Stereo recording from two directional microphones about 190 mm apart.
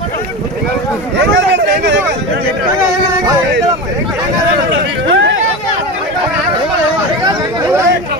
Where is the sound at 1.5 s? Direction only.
65° right (ahead or behind).